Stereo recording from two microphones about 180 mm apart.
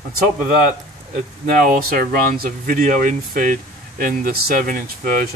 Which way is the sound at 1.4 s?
55° right (ahead or behind).